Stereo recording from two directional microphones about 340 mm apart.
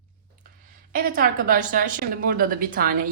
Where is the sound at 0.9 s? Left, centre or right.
Right.